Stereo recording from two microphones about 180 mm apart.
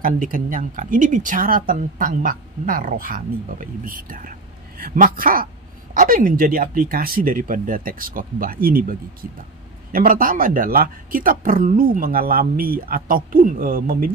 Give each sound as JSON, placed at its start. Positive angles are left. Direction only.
{"t": 0.0, "sound": "speech", "side_deg": -50}
{"t": 9.9, "sound": "speech", "side_deg": -50}